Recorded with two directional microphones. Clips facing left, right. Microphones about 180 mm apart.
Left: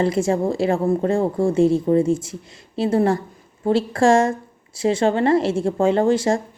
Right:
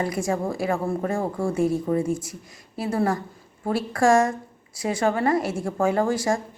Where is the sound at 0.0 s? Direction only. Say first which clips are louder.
Left 6 dB; 25° left (ahead or behind).